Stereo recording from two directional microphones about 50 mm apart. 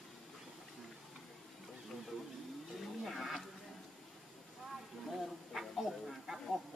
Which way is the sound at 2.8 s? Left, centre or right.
Centre.